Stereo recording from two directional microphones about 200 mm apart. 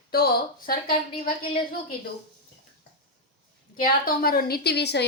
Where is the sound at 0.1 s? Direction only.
50° left (ahead or behind).